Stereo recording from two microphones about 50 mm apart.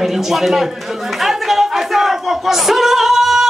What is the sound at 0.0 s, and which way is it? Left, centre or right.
Speech, centre.